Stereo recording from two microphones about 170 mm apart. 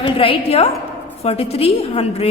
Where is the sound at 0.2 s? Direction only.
35° left (ahead or behind).